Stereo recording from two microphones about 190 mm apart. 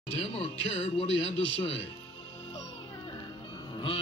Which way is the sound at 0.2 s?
30° left (ahead or behind).